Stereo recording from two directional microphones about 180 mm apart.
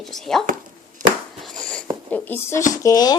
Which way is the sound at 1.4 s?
Centre (ahead or behind).